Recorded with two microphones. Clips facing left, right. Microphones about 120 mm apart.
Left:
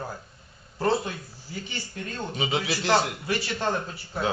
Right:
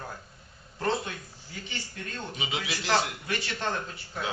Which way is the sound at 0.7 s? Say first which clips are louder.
Left 5 dB; 30° left (ahead or behind).